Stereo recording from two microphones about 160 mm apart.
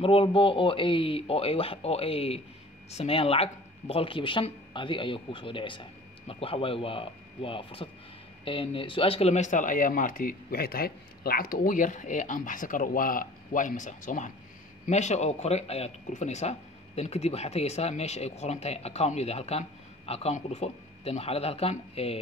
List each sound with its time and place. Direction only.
0.0 s speech: 35° left (ahead or behind)